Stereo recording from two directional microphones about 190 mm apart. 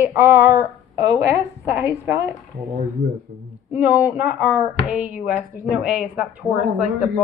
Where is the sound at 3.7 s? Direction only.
10° right (ahead or behind).